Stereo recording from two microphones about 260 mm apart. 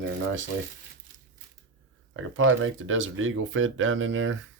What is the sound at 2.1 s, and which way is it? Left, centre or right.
Speech, right.